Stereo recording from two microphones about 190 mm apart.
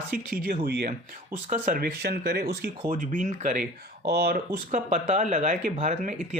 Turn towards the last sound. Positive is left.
turn(degrees=-40)  # may be behind; listen again after turning